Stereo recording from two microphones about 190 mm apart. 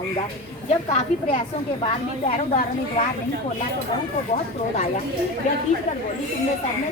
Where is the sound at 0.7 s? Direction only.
30° left (ahead or behind).